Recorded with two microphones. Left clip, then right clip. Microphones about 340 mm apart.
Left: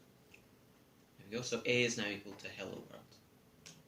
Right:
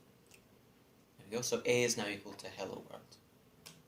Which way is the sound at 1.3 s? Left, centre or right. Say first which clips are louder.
Right 2 dB; centre.